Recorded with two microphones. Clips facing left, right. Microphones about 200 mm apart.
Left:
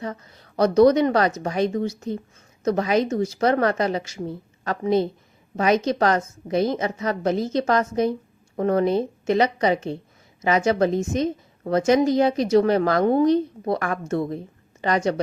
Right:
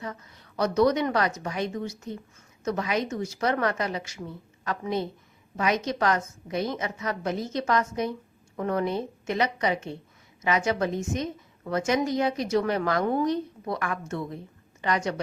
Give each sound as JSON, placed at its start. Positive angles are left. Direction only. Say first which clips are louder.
{"t": 0.0, "sound": "a woman's voice", "louder": "left 6 dB", "side_deg": 35}